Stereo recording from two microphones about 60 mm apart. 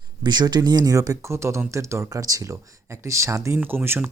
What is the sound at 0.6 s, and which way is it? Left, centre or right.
Speech, right.